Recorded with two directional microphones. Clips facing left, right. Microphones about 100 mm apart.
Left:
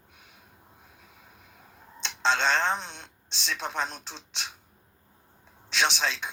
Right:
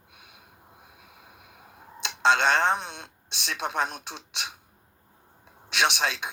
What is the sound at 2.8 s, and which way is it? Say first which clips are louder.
Speech: right 3 dB; 50° right (ahead or behind).